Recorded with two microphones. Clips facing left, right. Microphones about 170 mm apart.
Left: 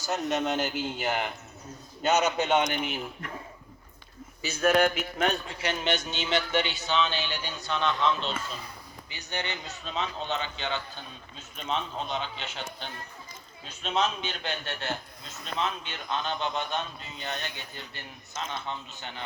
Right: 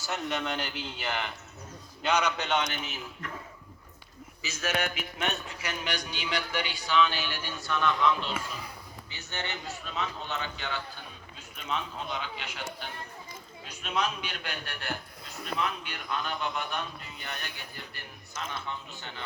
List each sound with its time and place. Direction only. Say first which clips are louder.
0.0 s a man's voice: left 4 dB; 40° left (ahead or behind)
3.0 s a man's voice: left 3 dB; 30° left (ahead or behind)
4.4 s a man's voice: left 8 dB; 35° left (ahead or behind)
4.8 s a man's voice: left 8 dB; 45° left (ahead or behind); by 19.2 s 20° left (ahead or behind)